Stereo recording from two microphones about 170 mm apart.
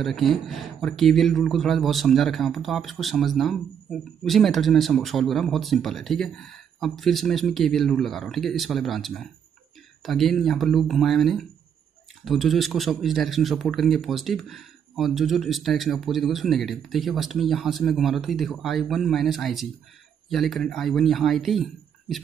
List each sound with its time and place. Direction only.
0.0 s speech: centre (ahead or behind)